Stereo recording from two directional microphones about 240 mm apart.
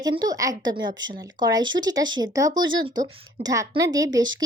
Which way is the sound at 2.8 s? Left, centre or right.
Right.